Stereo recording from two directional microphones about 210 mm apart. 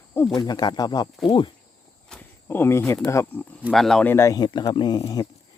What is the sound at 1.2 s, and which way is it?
Speech, 25° left (ahead or behind).